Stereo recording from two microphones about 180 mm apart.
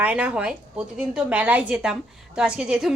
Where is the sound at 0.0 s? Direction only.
5° right (ahead or behind).